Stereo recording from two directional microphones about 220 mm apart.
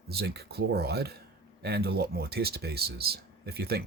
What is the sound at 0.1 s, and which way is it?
Speech, 45° right (ahead or behind).